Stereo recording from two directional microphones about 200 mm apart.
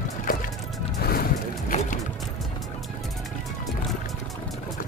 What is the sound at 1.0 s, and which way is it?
Music, 50° left (ahead or behind).